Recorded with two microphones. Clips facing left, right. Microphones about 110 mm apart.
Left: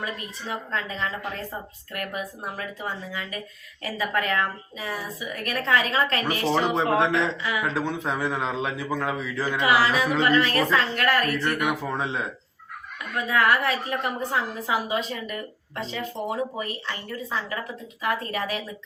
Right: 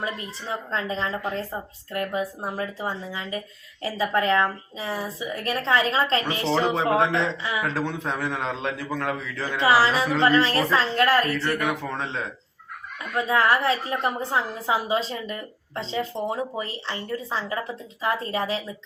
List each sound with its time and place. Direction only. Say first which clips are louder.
0.0 s a woman's voice: right 2 dB; 30° right (ahead or behind)
7.0 s a man's voice: even; centre (ahead or behind)
9.6 s a woman's voice: right 2 dB; 30° right (ahead or behind)
11.6 s speech: left 1 dB; 10° left (ahead or behind)
13.1 s a woman's voice: right 1 dB; 25° right (ahead or behind)